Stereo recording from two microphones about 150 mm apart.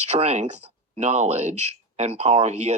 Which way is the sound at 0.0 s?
45° right (ahead or behind).